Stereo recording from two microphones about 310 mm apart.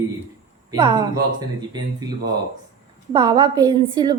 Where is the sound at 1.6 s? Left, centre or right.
Centre.